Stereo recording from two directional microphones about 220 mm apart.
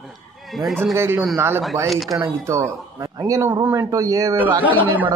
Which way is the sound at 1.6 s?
Centre (ahead or behind).